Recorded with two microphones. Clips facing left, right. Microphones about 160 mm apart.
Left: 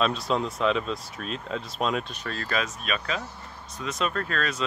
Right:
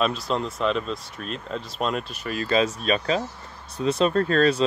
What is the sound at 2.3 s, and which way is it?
Speech, 20° right (ahead or behind).